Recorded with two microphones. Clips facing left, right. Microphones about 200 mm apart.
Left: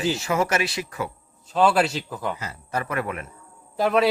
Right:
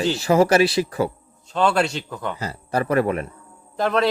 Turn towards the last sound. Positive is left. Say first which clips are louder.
# even
turn(degrees=5)  # may be behind; listen again after turning